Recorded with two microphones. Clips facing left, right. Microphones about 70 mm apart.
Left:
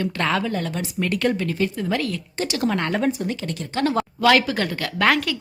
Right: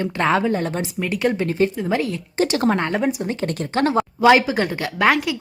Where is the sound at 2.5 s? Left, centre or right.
Right.